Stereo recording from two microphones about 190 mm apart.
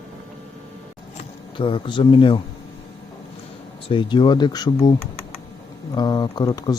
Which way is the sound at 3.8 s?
25° left (ahead or behind).